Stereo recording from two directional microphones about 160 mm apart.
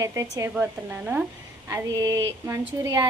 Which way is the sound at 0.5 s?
10° right (ahead or behind).